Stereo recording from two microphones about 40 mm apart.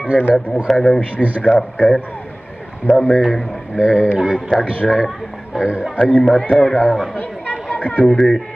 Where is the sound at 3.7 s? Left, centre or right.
Right.